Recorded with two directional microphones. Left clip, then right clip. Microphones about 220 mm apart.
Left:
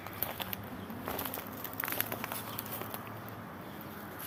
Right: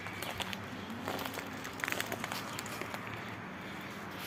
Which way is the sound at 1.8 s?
15° right (ahead or behind).